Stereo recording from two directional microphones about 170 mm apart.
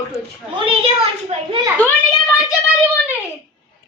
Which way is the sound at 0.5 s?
30° right (ahead or behind).